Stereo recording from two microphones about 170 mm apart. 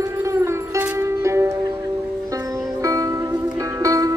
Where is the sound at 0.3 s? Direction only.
15° right (ahead or behind).